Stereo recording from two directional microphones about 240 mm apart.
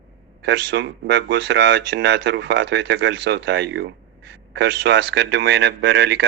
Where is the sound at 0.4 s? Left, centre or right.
Right.